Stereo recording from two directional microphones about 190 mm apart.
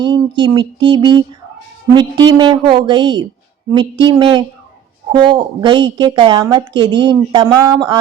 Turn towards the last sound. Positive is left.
turn(degrees=-25)  # may be behind; listen again after turning